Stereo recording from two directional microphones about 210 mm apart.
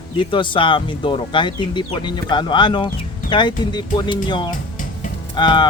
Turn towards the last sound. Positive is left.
turn(degrees=20)  # may be behind; listen again after turning